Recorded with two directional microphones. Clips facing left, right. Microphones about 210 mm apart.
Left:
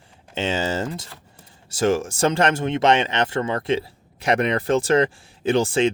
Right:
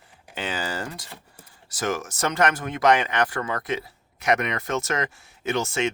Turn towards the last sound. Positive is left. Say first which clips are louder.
# left 6 dB
turn(degrees=30)  # may be behind; listen again after turning